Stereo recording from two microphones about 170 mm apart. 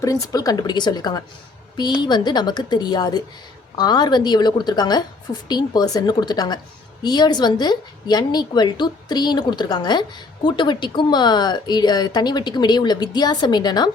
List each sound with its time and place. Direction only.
0.0 s a woman's voice: 20° left (ahead or behind)